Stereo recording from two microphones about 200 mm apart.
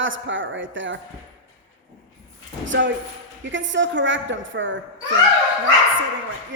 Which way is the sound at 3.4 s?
70° right (ahead or behind).